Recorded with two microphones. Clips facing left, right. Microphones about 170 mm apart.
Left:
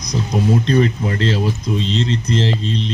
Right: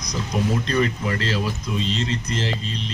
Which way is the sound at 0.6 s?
30° left (ahead or behind).